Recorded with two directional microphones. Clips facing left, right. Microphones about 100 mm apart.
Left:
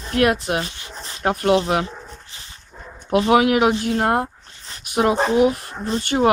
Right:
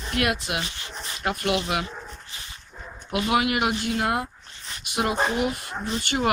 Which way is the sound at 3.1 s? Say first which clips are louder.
Left 8 dB; 40° left (ahead or behind).